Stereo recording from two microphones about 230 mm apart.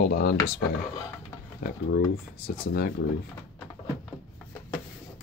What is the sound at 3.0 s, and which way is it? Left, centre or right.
Speech, left.